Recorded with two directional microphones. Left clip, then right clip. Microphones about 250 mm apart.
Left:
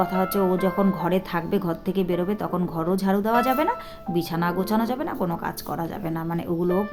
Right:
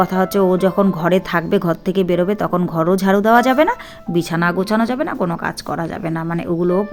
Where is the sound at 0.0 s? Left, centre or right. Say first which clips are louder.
Right 7 dB; right.